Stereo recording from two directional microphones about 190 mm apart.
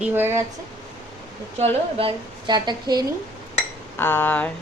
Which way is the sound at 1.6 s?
30° right (ahead or behind).